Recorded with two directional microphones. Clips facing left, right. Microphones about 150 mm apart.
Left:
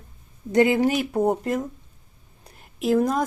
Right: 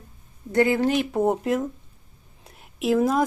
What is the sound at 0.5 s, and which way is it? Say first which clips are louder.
Speech: left 2 dB; 15° left (ahead or behind).